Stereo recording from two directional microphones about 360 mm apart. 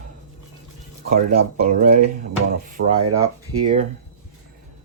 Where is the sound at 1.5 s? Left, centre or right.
Centre.